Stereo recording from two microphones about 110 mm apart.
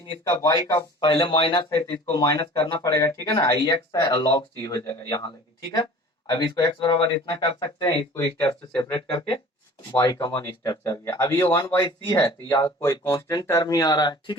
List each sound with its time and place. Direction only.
0.3 s speech: 30° left (ahead or behind)
0.9 s speech: 50° left (ahead or behind)
2.0 s speech: 35° left (ahead or behind)
6.2 s speech: 40° left (ahead or behind)
9.0 s speech: 55° left (ahead or behind)
10.0 s speech: 35° left (ahead or behind)